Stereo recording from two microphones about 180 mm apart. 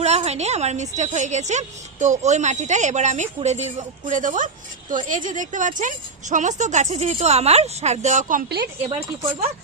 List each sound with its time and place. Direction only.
0.0 s a woman's voice: 35° right (ahead or behind)